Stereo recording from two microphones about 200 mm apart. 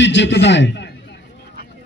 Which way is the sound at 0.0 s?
65° left (ahead or behind).